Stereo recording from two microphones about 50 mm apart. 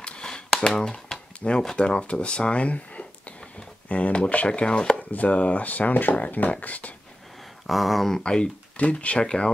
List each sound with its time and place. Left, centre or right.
0.0 s a sound: centre
0.6 s speech: centre
1.4 s speech: left
5.1 s speech: left
7.6 s a sound: centre
8.2 s speech: centre
9.2 s speech: centre